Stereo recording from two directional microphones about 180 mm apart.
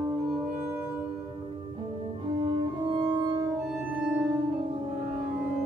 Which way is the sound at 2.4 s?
25° right (ahead or behind).